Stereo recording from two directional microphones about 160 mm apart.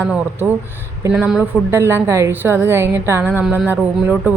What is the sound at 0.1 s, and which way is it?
A woman's voice, 10° right (ahead or behind).